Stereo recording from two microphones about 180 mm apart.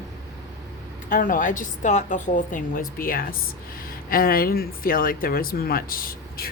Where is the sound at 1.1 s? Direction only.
50° left (ahead or behind).